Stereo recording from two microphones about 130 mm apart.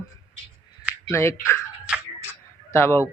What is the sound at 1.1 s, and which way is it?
Speech, 20° left (ahead or behind).